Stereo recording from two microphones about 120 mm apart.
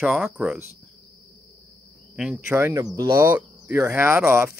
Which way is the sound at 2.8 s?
30° right (ahead or behind).